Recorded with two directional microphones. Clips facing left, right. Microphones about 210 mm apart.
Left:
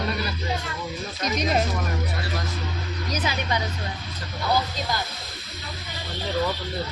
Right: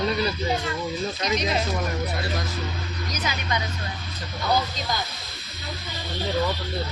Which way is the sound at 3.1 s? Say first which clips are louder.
Left 3 dB; 30° left (ahead or behind).